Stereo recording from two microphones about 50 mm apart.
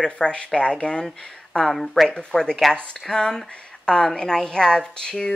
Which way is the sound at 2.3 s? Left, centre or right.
Centre.